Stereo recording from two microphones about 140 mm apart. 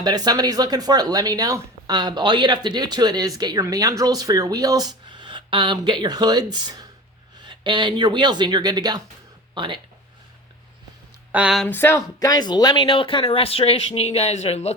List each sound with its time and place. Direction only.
0.0 s speech: 30° right (ahead or behind)
11.3 s speech: 5° right (ahead or behind)
11.6 s speech: 15° left (ahead or behind); by 14.7 s 50° left (ahead or behind)